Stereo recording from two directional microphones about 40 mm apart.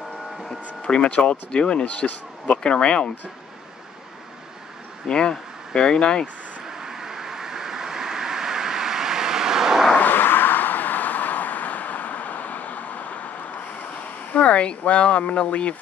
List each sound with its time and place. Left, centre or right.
0.5 s speech: left
5.0 s speech: left
6.7 s vehicle: centre
9.9 s a sound: left
14.0 s speech: left